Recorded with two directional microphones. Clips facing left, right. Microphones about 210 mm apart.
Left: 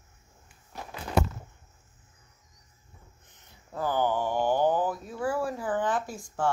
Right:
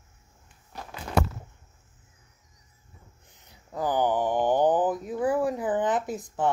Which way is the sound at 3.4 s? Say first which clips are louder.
Right 2 dB; 15° right (ahead or behind).